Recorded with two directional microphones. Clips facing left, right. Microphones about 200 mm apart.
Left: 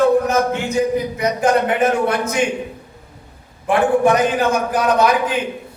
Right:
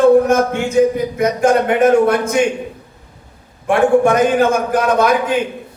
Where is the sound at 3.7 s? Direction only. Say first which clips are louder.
Right 3 dB; 50° right (ahead or behind).